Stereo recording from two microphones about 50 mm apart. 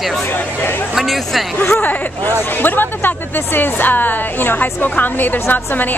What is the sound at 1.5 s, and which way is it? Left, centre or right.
Speech, left.